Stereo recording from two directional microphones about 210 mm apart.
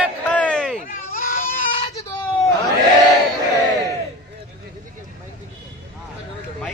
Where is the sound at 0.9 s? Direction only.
45° left (ahead or behind).